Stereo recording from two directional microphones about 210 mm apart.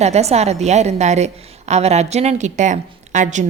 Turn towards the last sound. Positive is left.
turn(degrees=-35)  # may be behind; listen again after turning